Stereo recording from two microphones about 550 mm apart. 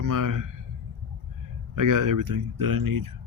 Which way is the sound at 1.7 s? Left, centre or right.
Right.